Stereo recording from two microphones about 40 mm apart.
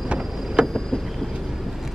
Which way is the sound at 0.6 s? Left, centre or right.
Right.